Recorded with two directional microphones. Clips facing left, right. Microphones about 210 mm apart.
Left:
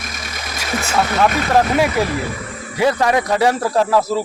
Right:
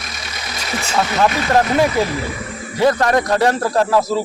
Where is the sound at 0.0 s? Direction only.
50° left (ahead or behind).